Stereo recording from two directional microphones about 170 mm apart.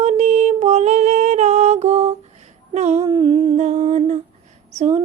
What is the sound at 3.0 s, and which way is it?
Humming, 25° right (ahead or behind).